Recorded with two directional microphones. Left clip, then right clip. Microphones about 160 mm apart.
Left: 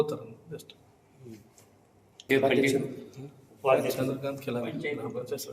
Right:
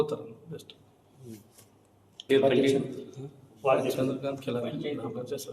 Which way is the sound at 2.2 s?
5° left (ahead or behind).